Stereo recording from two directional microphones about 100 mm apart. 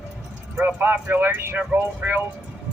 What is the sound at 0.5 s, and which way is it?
Speech, 20° right (ahead or behind).